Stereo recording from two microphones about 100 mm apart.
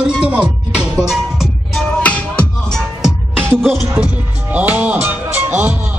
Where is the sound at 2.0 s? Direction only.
10° left (ahead or behind).